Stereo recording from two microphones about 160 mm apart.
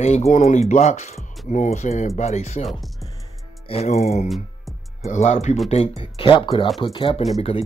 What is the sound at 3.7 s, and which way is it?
Speech, 40° left (ahead or behind).